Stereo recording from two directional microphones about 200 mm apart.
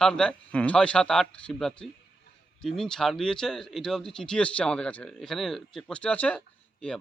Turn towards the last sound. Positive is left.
turn(degrees=5)  # may be behind; listen again after turning